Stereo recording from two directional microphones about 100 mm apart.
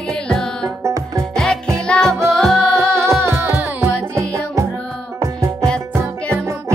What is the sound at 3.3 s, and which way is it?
Music, 20° right (ahead or behind).